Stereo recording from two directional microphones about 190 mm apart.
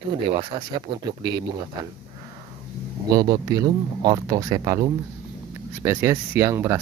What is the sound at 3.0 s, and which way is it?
Speech, 20° right (ahead or behind).